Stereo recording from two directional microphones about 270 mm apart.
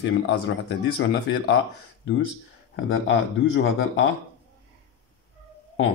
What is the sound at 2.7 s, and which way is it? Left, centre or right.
Speech, left.